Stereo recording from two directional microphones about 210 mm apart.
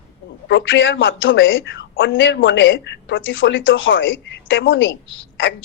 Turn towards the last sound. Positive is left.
turn(degrees=65)  # may be behind; listen again after turning